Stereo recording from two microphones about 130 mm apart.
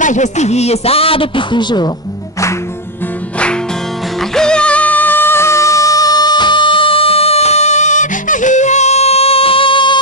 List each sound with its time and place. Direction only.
0.0 s a man's voice: 70° left (ahead or behind); by 1.9 s 35° left (ahead or behind)
4.4 s music: 5° left (ahead or behind); by 9.9 s 40° left (ahead or behind)